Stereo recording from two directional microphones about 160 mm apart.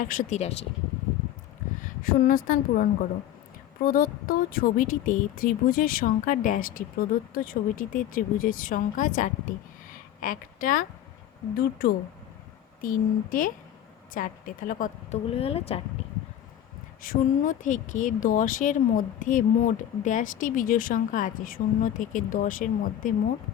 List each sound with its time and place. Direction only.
0.0 s speech: 55° left (ahead or behind)
1.8 s speech: 60° left (ahead or behind)
15.3 s speech: 40° left (ahead or behind)
17.0 s speech: 60° left (ahead or behind)